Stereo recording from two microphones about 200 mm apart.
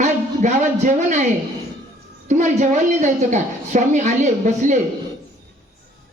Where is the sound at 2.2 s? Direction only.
40° right (ahead or behind).